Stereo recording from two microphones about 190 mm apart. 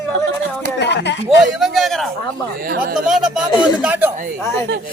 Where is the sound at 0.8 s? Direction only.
65° left (ahead or behind).